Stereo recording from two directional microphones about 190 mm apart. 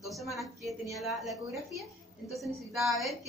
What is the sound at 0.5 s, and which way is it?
Speech, 15° right (ahead or behind).